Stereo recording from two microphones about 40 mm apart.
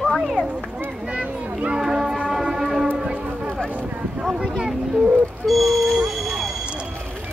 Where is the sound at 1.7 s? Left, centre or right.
Centre.